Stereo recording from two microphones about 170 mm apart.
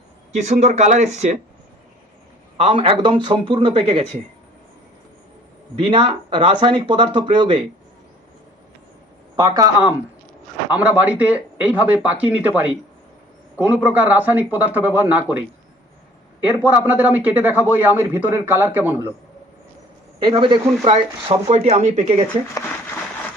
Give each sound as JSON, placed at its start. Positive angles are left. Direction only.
{"t": 0.4, "sound": "speech", "side_deg": -45}
{"t": 2.6, "sound": "speech", "side_deg": -35}
{"t": 5.8, "sound": "speech", "side_deg": -30}
{"t": 9.3, "sound": "speech", "side_deg": -25}
{"t": 10.7, "sound": "a man's voice", "side_deg": -10}
{"t": 20.1, "sound": "speech", "side_deg": -30}